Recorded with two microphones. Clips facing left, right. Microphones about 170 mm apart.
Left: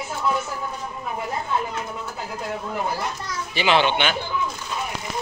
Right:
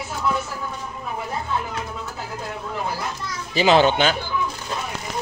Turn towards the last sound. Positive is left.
turn(degrees=-40)  # may be behind; listen again after turning